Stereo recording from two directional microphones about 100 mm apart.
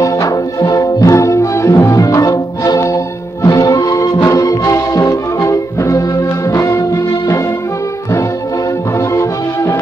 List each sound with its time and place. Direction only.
0.0 s music: 35° left (ahead or behind)
9.1 s music: 30° left (ahead or behind)